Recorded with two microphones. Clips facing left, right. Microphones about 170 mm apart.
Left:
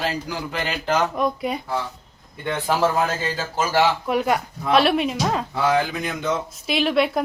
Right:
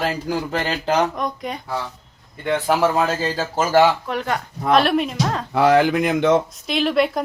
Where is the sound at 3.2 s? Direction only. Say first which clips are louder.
Right 3 dB; 45° right (ahead or behind).